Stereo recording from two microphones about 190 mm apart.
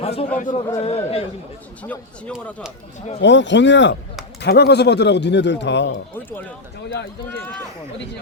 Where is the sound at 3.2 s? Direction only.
70° left (ahead or behind).